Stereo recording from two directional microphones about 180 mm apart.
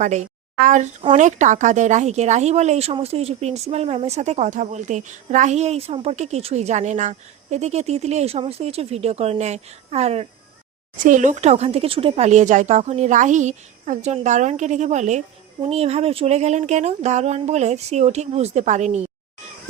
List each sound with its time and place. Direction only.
0.0 s speech: 40° right (ahead or behind)
10.9 s speech: 45° right (ahead or behind)